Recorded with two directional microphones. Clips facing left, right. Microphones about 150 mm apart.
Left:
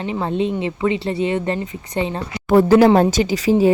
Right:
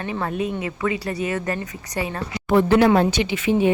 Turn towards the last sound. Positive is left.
turn(degrees=35)  # may be behind; listen again after turning